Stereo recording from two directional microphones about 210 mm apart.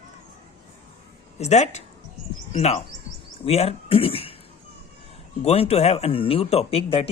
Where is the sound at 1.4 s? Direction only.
35° left (ahead or behind).